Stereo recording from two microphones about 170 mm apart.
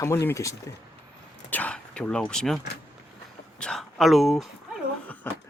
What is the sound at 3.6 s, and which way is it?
Speech, 5° left (ahead or behind).